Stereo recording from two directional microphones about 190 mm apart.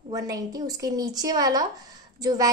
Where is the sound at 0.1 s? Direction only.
20° right (ahead or behind).